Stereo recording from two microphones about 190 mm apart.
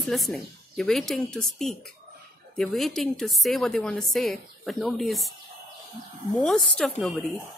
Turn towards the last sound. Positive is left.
turn(degrees=0)  # may be behind; listen again after turning